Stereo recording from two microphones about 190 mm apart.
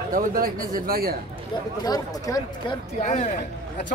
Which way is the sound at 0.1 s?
45° right (ahead or behind).